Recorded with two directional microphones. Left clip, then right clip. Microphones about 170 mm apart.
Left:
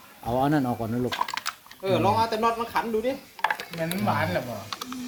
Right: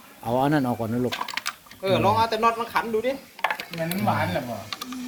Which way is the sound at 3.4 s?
5° left (ahead or behind).